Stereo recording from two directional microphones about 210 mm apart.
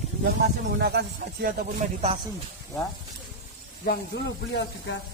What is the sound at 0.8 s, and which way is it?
Speech, 50° right (ahead or behind).